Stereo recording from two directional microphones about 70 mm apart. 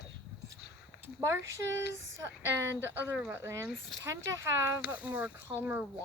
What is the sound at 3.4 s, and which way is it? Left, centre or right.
Speech, right.